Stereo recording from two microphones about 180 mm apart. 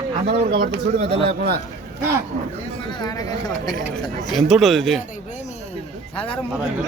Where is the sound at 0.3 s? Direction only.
60° right (ahead or behind).